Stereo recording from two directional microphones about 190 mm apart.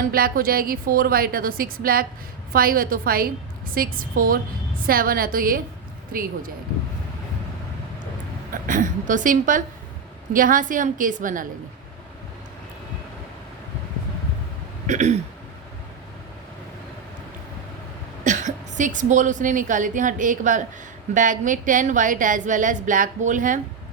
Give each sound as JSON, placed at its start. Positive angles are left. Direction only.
{"t": 0.0, "sound": "a woman's voice", "side_deg": -50}
{"t": 8.6, "sound": "a woman's voice", "side_deg": -45}
{"t": 14.8, "sound": "a sound", "side_deg": -40}
{"t": 18.2, "sound": "a woman's voice", "side_deg": -40}